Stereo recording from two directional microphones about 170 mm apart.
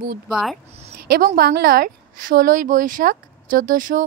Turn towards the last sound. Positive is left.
turn(degrees=-50)  # may be behind; listen again after turning